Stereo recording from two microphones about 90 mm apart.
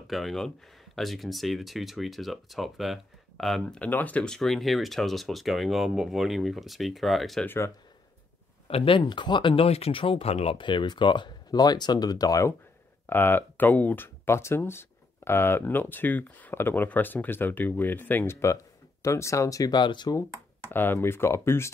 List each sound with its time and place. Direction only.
0.0 s speech: centre (ahead or behind)
7.4 s speech: 25° left (ahead or behind)
8.6 s speech: 85° left
9.0 s speech: 60° left (ahead or behind); by 12.5 s 40° left (ahead or behind)
13.1 s speech: 25° left (ahead or behind); by 19.8 s 40° left (ahead or behind)
19.8 s speech: 55° left (ahead or behind)
20.7 s speech: 25° left (ahead or behind)